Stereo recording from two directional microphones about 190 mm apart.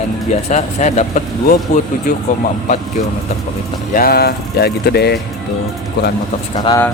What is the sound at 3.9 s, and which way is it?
Speech, 50° left (ahead or behind).